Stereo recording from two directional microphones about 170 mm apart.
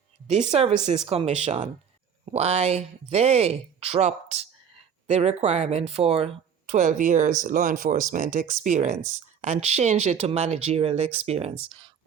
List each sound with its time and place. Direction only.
0.3 s speech: 40° right (ahead or behind)